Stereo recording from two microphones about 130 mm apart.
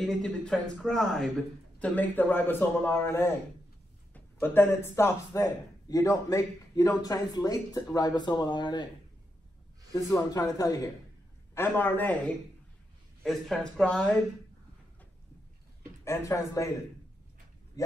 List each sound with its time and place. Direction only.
0.0 s a man's voice: 5° left (ahead or behind); by 8.8 s 35° left (ahead or behind)
10.0 s a man's voice: 25° left (ahead or behind)
13.2 s a man's voice: 5° left (ahead or behind)
16.0 s a man's voice: 20° left (ahead or behind)
17.8 s a man's voice: 25° left (ahead or behind)